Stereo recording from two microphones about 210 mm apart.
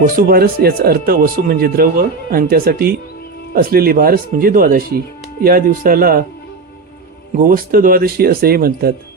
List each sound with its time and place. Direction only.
0.2 s speech: 45° right (ahead or behind)
7.3 s speech: 45° right (ahead or behind)